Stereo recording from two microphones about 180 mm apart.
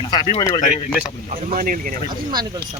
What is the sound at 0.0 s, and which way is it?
Speech, 25° left (ahead or behind).